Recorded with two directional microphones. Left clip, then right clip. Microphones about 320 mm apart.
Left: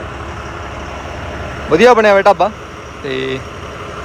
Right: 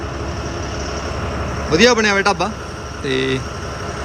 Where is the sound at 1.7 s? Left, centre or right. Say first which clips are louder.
Left 6 dB; centre.